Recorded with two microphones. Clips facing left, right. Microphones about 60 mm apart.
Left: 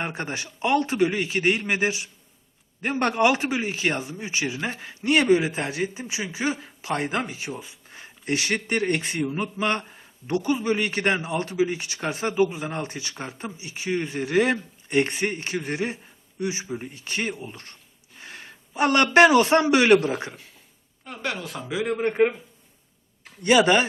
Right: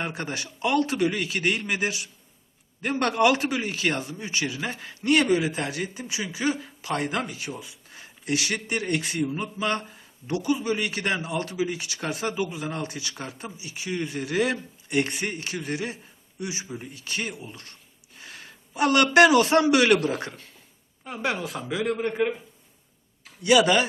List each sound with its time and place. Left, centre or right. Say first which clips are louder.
0.0 s a man's voice: left 1 dB; left; by 20.6 s centre
21.0 s speech: right 3 dB; centre
21.8 s speech: left 1 dB; centre
23.4 s a man's voice: left 1 dB; left